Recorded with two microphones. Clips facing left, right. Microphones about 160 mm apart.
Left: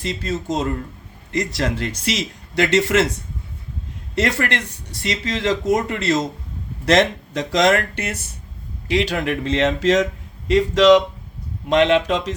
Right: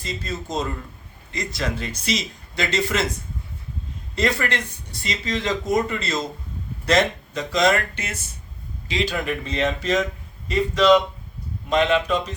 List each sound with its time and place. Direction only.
0.0 s speech: 75° left (ahead or behind)
4.1 s a man's voice: 80° left
11.7 s speech: 80° left
12.0 s a man's voice: 90° left